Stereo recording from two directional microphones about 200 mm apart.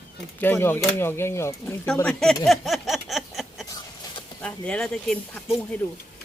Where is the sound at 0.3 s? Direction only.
10° left (ahead or behind).